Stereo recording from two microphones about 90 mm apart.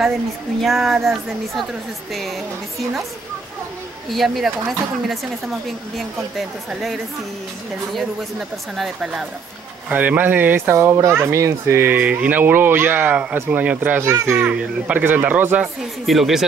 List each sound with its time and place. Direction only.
0.6 s speech: centre (ahead or behind)
4.1 s speech: centre (ahead or behind)
9.8 s a child's voice: 15° right (ahead or behind)
14.0 s a child's voice: 30° right (ahead or behind)
14.4 s speech: 15° right (ahead or behind)
16.1 s speech: 5° right (ahead or behind)